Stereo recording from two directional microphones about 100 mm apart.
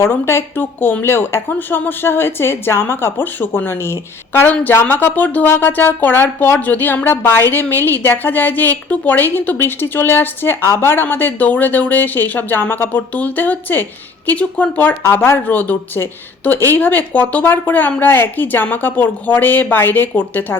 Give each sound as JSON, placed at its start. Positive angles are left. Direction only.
{"t": 0.0, "sound": "speech", "side_deg": 25}